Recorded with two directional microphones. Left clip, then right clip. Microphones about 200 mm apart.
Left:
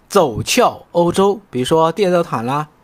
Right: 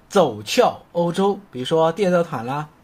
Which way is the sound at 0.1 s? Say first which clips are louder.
Left 4 dB; 30° left (ahead or behind).